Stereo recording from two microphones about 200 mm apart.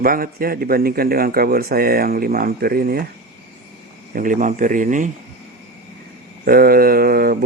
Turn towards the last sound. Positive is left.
turn(degrees=-45)  # may be behind; listen again after turning